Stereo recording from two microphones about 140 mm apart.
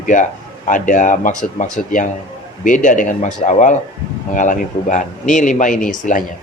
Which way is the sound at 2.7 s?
65° left (ahead or behind).